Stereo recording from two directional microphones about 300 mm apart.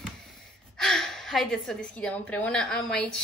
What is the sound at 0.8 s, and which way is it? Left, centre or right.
A woman's voice, centre.